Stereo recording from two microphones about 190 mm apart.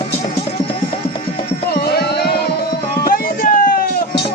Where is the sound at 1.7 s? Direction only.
55° left (ahead or behind).